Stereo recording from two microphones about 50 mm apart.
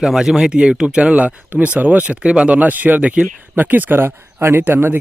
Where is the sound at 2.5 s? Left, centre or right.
Right.